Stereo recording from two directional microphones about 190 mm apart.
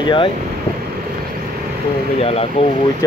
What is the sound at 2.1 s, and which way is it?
Speech, 30° left (ahead or behind).